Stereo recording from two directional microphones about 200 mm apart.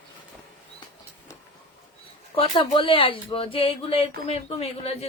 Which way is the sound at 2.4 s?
25° left (ahead or behind).